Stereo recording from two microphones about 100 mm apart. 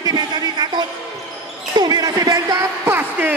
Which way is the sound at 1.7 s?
45° right (ahead or behind).